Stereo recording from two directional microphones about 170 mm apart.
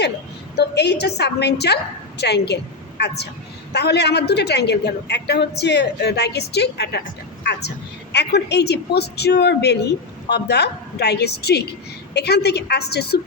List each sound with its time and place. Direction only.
0.5 s a woman's voice: 80° left